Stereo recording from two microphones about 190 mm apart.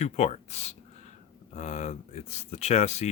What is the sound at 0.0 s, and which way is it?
Speech, 35° left (ahead or behind).